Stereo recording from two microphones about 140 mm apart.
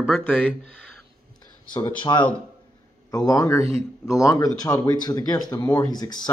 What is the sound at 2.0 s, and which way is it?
Speech, 35° left (ahead or behind).